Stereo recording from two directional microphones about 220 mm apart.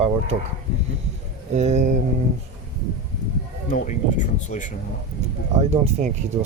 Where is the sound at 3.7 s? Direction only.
35° left (ahead or behind).